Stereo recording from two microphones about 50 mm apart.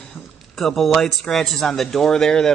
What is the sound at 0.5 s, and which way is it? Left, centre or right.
Speech, centre.